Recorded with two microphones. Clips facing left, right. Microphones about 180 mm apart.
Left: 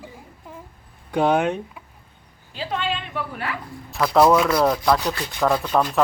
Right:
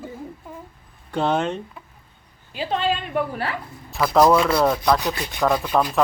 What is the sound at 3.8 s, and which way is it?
Speech, centre (ahead or behind).